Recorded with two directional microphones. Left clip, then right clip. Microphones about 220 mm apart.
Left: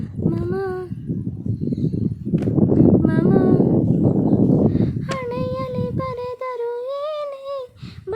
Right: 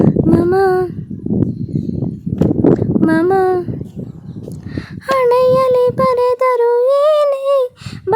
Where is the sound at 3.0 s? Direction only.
40° right (ahead or behind).